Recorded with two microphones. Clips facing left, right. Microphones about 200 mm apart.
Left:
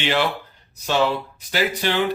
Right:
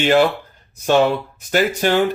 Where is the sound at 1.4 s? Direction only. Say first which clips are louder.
Right 7 dB; 50° right (ahead or behind).